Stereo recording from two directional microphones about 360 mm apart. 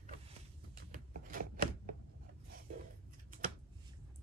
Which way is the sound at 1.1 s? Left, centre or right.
Right.